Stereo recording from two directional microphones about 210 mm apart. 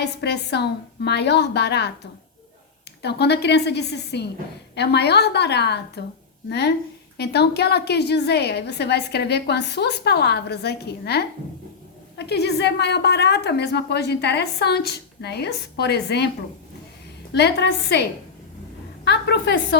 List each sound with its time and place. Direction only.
0.0 s a woman's voice: 50° left (ahead or behind)
3.0 s a woman's voice: 50° left (ahead or behind)
17.3 s a woman's voice: 50° left (ahead or behind)
19.0 s a woman's voice: 55° left (ahead or behind)